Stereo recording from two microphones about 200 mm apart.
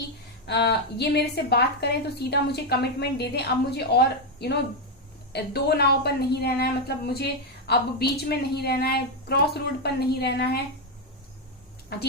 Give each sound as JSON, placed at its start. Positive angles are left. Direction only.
{"t": 0.4, "sound": "a woman's voice", "side_deg": 55}
{"t": 11.9, "sound": "a woman's voice", "side_deg": 55}